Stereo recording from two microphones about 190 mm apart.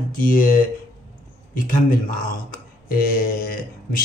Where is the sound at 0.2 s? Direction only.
45° left (ahead or behind).